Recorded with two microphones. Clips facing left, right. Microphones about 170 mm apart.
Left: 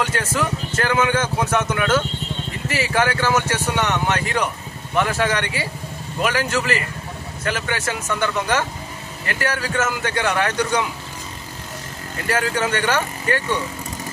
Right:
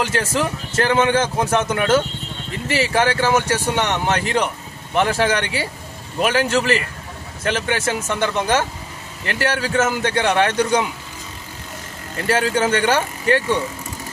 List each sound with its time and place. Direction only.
0.1 s speech: 25° right (ahead or behind)
12.3 s speech: 30° right (ahead or behind)